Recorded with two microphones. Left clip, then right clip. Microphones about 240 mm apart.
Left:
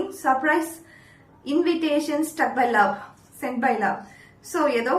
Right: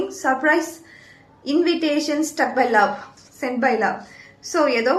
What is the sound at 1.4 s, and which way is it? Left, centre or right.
A woman's voice, centre.